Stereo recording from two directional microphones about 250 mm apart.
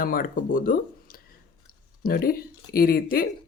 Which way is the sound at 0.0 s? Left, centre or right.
Left.